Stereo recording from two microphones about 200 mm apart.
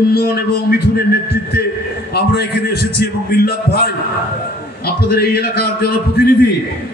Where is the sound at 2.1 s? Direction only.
50° left (ahead or behind).